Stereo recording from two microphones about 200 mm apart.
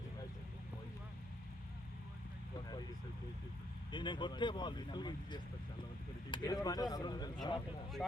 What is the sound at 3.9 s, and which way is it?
Speech, 25° left (ahead or behind).